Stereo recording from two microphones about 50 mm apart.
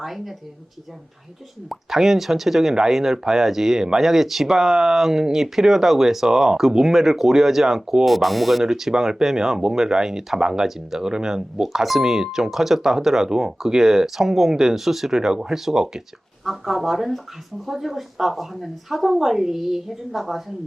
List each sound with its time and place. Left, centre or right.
0.0 s a woman's voice: centre
1.7 s a woman's voice: centre